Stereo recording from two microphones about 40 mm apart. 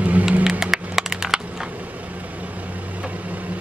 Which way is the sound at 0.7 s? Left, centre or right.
Centre.